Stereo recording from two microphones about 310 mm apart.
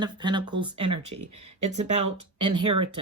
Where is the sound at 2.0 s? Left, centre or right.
Right.